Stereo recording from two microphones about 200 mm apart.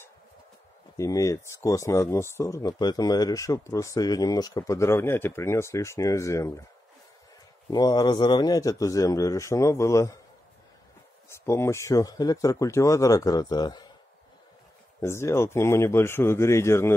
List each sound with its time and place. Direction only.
0.9 s speech: 15° left (ahead or behind)
7.7 s speech: 20° left (ahead or behind)
11.4 s speech: 15° left (ahead or behind)
15.0 s speech: 15° left (ahead or behind)